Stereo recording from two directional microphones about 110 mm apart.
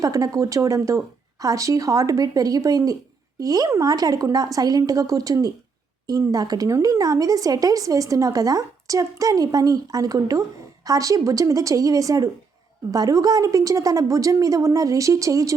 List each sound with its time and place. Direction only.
0.0 s a woman's voice: 30° right (ahead or behind)